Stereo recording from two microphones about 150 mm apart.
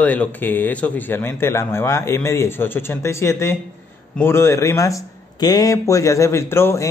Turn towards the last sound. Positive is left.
turn(degrees=15)  # may be behind; listen again after turning